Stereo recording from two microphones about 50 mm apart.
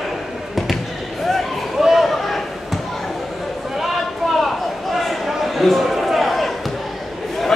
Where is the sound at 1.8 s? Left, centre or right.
Centre.